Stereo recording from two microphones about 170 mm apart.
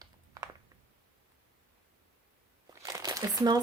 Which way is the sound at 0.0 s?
20° right (ahead or behind).